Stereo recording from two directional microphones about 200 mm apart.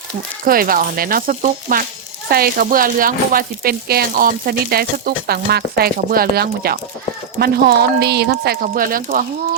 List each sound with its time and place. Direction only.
0.4 s speech: 45° right (ahead or behind)